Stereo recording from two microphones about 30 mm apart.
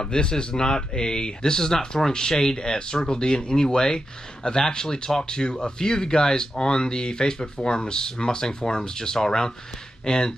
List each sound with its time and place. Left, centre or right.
0.0 s speech: left